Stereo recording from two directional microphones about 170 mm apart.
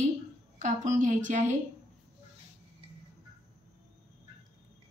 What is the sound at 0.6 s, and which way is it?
A woman's voice, 45° right (ahead or behind).